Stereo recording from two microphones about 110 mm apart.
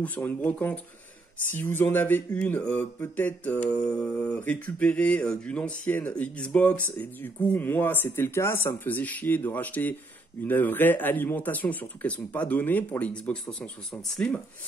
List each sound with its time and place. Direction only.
0.0 s mantra: 15° left (ahead or behind)